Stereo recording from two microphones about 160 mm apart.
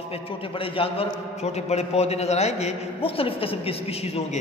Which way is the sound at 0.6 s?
35° left (ahead or behind).